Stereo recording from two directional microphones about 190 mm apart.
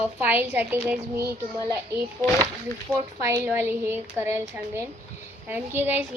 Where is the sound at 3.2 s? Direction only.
15° right (ahead or behind).